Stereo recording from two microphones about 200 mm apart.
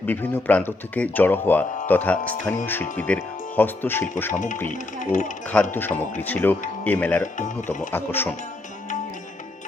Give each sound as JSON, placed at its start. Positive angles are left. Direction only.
{"t": 0.0, "sound": "speech", "side_deg": 10}
{"t": 4.7, "sound": "speech", "side_deg": 40}
{"t": 5.7, "sound": "speech", "side_deg": 10}
{"t": 7.3, "sound": "speech", "side_deg": 40}
{"t": 7.9, "sound": "speech", "side_deg": 10}